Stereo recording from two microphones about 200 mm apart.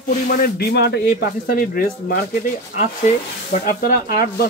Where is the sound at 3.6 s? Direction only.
50° left (ahead or behind).